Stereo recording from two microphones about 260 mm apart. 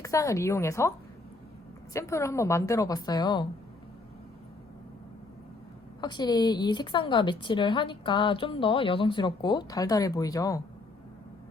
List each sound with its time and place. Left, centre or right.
0.0 s a woman's voice: centre
6.0 s a woman's voice: centre